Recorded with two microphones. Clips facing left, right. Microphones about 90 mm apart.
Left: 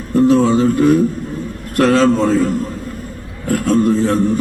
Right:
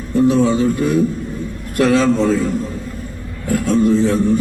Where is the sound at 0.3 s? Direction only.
50° left (ahead or behind).